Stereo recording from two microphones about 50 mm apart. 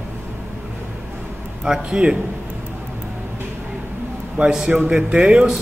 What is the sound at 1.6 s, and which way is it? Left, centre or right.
Speech, centre.